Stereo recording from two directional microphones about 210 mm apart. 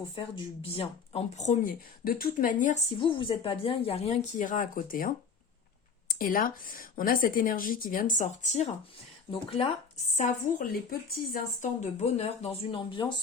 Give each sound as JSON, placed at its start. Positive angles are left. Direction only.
{"t": 0.2, "sound": "speech", "side_deg": 25}
{"t": 3.0, "sound": "speech", "side_deg": 25}
{"t": 10.2, "sound": "speech", "side_deg": 35}